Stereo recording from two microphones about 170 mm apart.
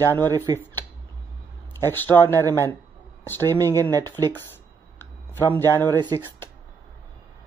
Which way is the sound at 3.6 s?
20° right (ahead or behind).